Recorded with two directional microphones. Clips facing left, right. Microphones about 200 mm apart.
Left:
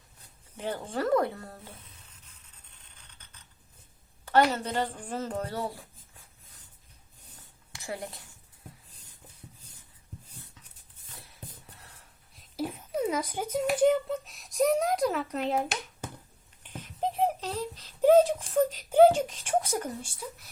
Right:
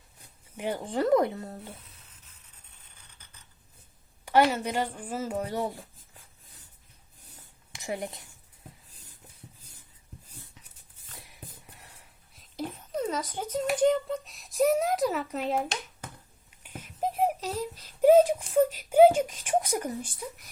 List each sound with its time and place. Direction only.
0.5 s speech: 15° right (ahead or behind)
4.5 s speech: 10° right (ahead or behind)
7.7 s a woman's voice: 20° right (ahead or behind)
11.3 s a sound: 15° right (ahead or behind)
12.4 s speech: 5° left (ahead or behind)
16.6 s a sound: 10° right (ahead or behind)
18.4 s speech: 10° right (ahead or behind)